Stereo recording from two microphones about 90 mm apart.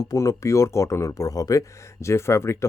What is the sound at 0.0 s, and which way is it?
Speech, 40° left (ahead or behind).